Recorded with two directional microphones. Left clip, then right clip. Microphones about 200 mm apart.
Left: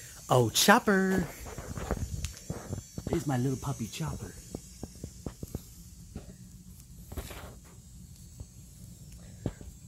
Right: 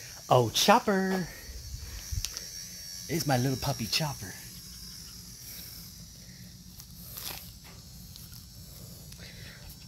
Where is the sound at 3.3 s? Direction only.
35° right (ahead or behind).